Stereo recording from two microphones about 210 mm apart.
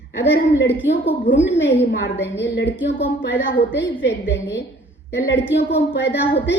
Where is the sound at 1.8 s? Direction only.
55° left (ahead or behind).